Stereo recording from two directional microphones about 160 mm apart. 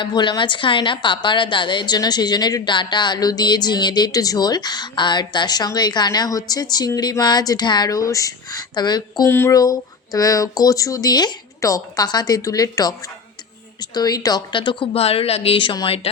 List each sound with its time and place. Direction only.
0.0 s a woman's voice: 30° left (ahead or behind)
13.9 s a woman's voice: 25° left (ahead or behind)